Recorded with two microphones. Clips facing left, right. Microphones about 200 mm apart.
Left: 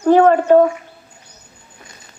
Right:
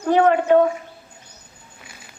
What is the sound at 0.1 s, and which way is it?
Speech, 40° left (ahead or behind).